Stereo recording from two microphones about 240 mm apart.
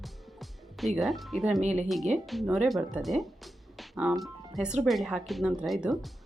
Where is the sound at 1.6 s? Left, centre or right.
Right.